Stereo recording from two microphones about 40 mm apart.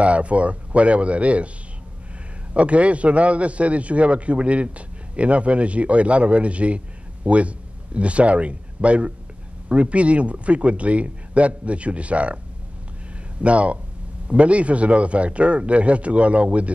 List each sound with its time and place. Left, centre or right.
0.0 s a man's voice: right
2.5 s a man's voice: right
13.4 s a man's voice: right